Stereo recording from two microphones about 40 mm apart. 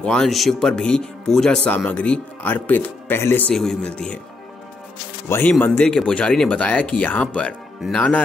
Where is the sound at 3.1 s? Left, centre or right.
Left.